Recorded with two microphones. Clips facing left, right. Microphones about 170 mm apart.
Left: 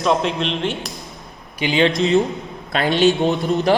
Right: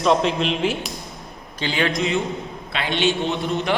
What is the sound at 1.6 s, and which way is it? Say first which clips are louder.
Speech: left 6 dB; 20° left (ahead or behind).